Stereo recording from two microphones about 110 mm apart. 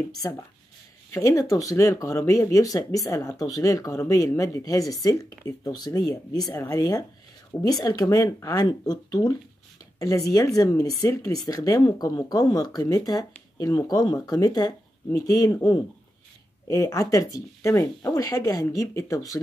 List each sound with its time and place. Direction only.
0.2 s speech: 30° left (ahead or behind)
6.5 s speech: 25° left (ahead or behind)
16.6 s speech: 30° left (ahead or behind)